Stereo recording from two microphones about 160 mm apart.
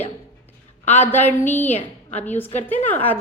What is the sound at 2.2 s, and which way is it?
Speech, 10° left (ahead or behind).